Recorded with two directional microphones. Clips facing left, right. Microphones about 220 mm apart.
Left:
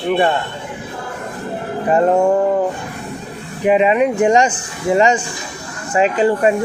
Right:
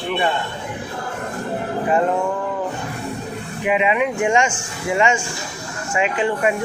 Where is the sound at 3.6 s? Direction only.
40° left (ahead or behind).